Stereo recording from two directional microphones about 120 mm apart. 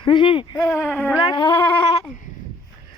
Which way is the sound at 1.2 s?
40° left (ahead or behind).